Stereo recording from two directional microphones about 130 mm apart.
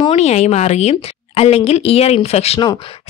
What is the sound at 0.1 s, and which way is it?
A woman's voice, 55° left (ahead or behind).